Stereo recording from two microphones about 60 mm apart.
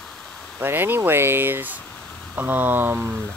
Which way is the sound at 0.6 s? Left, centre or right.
Right.